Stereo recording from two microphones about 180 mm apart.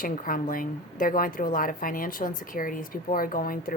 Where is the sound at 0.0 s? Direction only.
50° left (ahead or behind).